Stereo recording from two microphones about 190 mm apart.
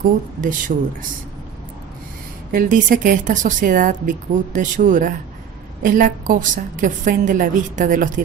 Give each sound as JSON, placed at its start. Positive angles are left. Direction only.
{"t": 0.0, "sound": "a woman's voice", "side_deg": -45}
{"t": 2.5, "sound": "a woman's voice", "side_deg": -45}